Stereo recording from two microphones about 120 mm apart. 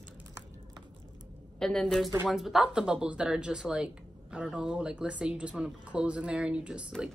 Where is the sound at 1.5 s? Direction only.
5° left (ahead or behind).